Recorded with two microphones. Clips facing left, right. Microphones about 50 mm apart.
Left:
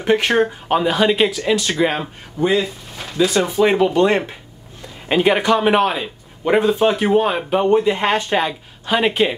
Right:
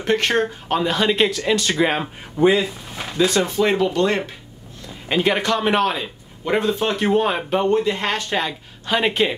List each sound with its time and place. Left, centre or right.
0.0 s speech: centre
3.3 s a man's voice: centre